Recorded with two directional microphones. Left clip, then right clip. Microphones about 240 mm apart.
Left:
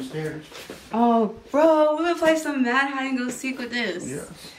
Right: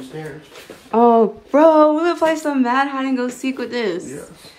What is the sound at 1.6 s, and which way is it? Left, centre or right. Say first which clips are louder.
Speech: right 6 dB; right.